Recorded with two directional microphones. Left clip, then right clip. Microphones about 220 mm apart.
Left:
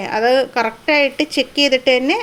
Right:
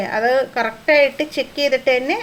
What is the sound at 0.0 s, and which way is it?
A woman's voice, 35° left (ahead or behind).